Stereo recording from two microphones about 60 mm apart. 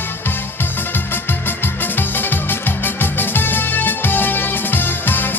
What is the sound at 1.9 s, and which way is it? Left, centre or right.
Music, left.